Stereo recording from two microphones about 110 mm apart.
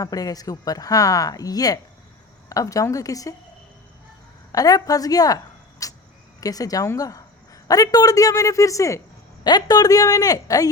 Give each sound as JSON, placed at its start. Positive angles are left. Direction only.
{"t": 0.0, "sound": "a woman's voice", "side_deg": 35}
{"t": 4.5, "sound": "a woman's voice", "side_deg": 35}
{"t": 5.8, "sound": "vehicle", "side_deg": 30}
{"t": 6.4, "sound": "a woman's voice", "side_deg": 35}